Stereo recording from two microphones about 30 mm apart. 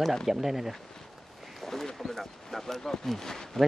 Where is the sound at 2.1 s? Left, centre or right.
Centre.